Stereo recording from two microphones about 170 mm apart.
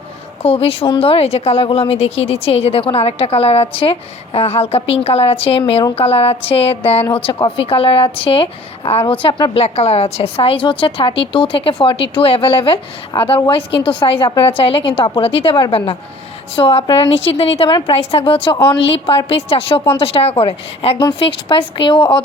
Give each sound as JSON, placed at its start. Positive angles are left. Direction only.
{"t": 0.4, "sound": "a woman's voice", "side_deg": 35}